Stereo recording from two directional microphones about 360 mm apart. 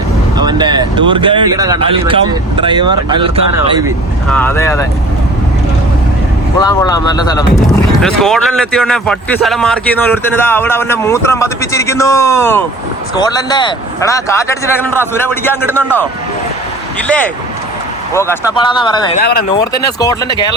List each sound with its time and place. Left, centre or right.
0.3 s speech: centre
4.3 s speech: centre
6.6 s speech: centre
19.2 s speech: left
19.5 s speech: centre